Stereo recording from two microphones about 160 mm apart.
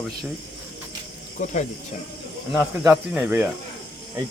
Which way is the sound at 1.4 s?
50° left (ahead or behind).